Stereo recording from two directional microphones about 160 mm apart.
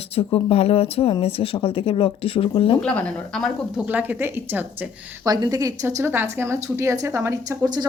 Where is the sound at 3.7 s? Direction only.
10° right (ahead or behind).